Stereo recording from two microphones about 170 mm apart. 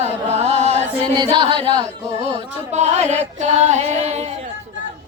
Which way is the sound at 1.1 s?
25° right (ahead or behind).